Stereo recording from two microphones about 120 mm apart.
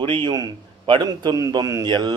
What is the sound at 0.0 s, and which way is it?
A man's voice, 45° right (ahead or behind).